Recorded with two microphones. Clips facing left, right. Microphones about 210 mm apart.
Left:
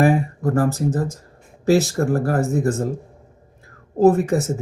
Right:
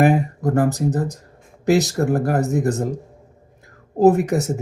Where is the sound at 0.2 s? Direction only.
40° right (ahead or behind).